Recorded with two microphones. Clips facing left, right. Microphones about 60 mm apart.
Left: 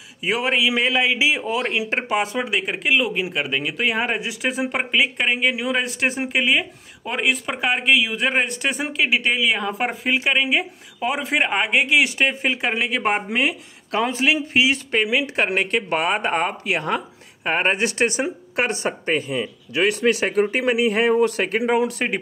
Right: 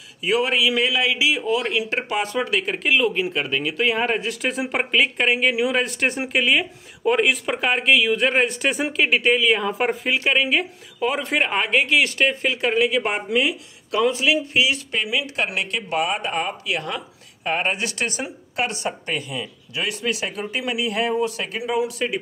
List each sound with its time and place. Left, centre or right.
0.2 s speech: left
19.7 s speech: left
21.1 s speech: left